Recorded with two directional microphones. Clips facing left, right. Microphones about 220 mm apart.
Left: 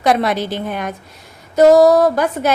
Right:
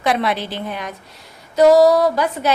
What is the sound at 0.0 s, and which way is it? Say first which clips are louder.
A woman's voice: left 4 dB; 45° left (ahead or behind).